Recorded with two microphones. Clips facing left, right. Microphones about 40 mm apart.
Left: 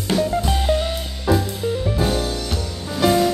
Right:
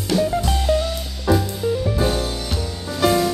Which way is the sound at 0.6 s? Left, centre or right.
Left.